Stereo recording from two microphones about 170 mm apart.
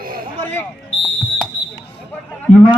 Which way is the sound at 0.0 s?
60° right (ahead or behind).